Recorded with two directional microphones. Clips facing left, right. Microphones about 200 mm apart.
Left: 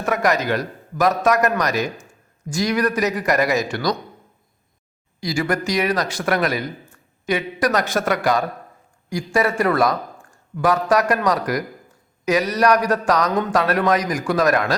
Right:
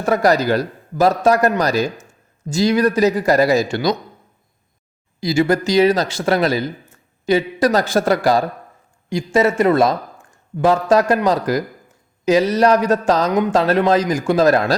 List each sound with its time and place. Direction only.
0.0 s a man's voice: 35° right (ahead or behind)
5.2 s a man's voice: 25° right (ahead or behind)